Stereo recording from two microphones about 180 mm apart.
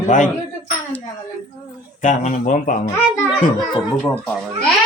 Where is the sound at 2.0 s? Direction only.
45° left (ahead or behind).